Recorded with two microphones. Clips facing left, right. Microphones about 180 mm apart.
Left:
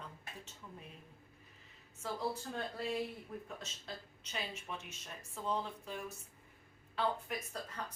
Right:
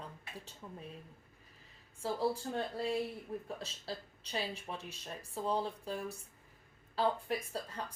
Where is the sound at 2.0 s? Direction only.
35° right (ahead or behind).